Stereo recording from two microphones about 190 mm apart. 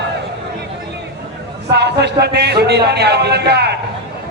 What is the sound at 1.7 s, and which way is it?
Speech, 60° right (ahead or behind).